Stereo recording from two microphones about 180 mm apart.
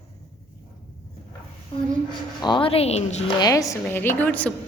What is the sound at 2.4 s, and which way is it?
Speech, 25° left (ahead or behind).